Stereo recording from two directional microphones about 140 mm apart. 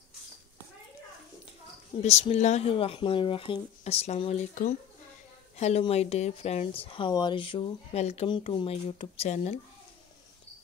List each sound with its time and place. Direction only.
2.0 s speech: 50° left (ahead or behind)
2.7 s speech: 40° left (ahead or behind)
8.0 s speech: 50° left (ahead or behind)